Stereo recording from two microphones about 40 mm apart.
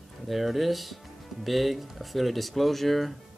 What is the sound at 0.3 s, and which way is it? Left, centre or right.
Speech, centre.